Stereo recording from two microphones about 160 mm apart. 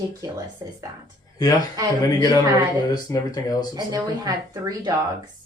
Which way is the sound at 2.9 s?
25° left (ahead or behind).